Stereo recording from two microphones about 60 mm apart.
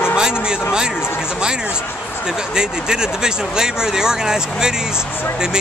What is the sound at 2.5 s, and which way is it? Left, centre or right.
Speech, centre.